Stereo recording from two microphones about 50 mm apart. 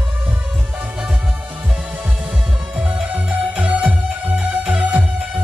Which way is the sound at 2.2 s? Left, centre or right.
Right.